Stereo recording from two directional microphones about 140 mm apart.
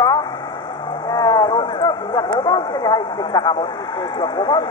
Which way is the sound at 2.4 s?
30° left (ahead or behind).